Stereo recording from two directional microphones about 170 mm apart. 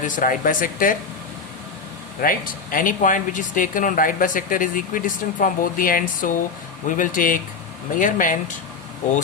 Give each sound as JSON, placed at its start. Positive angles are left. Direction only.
{"t": 0.0, "sound": "speech", "side_deg": 50}
{"t": 2.2, "sound": "speech", "side_deg": 55}